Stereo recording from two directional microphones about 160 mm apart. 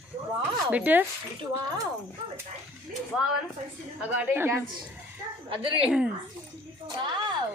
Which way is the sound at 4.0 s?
10° right (ahead or behind).